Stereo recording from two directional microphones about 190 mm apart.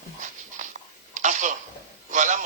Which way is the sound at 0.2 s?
40° right (ahead or behind).